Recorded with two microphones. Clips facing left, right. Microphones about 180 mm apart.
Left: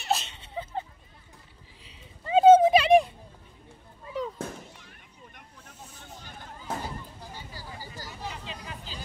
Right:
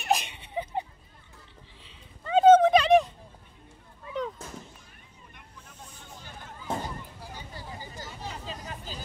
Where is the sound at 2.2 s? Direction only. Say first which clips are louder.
Left 1 dB; 10° left (ahead or behind).